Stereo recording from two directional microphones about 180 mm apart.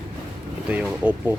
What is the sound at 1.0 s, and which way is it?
Speech, 5° right (ahead or behind).